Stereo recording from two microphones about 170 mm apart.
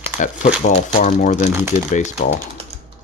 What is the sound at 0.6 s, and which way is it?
Speech, 45° left (ahead or behind).